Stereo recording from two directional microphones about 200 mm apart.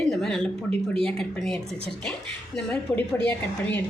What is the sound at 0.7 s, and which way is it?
Speech, 30° right (ahead or behind).